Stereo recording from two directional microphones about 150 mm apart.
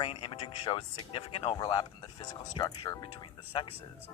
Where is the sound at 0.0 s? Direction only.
35° left (ahead or behind).